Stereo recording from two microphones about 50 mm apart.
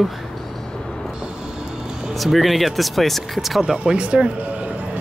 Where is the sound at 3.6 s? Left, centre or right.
Centre.